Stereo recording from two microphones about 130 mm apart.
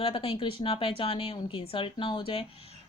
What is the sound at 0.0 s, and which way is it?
Speech, 45° left (ahead or behind).